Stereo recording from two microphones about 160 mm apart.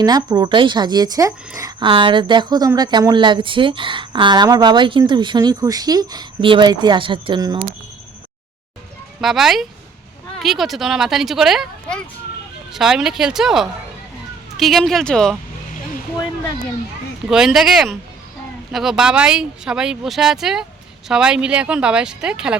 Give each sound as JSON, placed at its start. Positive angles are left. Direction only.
{"t": 0.0, "sound": "speech", "side_deg": -25}
{"t": 1.9, "sound": "speech", "side_deg": -30}
{"t": 9.2, "sound": "speech", "side_deg": 0}
{"t": 17.2, "sound": "speech", "side_deg": -5}